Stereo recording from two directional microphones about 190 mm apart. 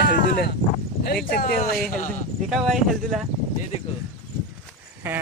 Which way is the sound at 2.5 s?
Centre (ahead or behind).